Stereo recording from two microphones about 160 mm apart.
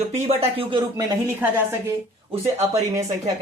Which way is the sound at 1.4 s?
10° right (ahead or behind).